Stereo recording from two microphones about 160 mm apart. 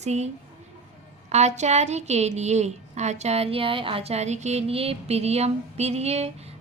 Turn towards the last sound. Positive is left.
turn(degrees=-40)  # may be behind; listen again after turning